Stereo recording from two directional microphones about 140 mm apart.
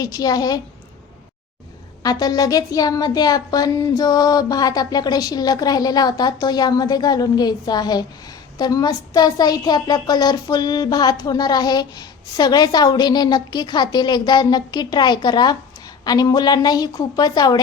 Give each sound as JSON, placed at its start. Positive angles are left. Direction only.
{"t": 0.0, "sound": "speech", "side_deg": 25}
{"t": 2.0, "sound": "speech", "side_deg": 30}